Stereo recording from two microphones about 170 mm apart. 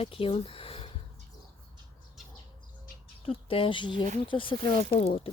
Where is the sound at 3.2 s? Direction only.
35° left (ahead or behind).